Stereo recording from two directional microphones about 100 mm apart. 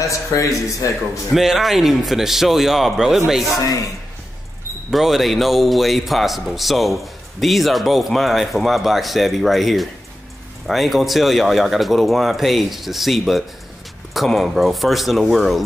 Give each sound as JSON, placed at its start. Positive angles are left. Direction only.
{"t": 0.0, "sound": "speech", "side_deg": 30}
{"t": 1.3, "sound": "a man's voice", "side_deg": 0}
{"t": 4.9, "sound": "a man's voice", "side_deg": 0}